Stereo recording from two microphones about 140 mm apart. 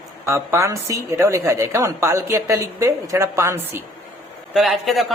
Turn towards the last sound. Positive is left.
turn(degrees=0)  # may be behind; listen again after turning